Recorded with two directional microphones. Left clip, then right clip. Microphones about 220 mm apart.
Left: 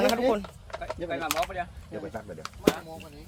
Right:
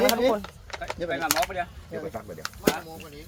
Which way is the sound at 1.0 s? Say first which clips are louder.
Right 4 dB; 45° right (ahead or behind).